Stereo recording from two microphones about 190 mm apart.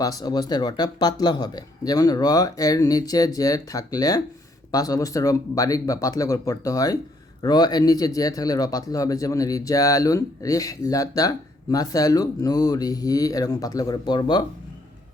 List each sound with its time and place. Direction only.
0.0 s speech: 20° left (ahead or behind)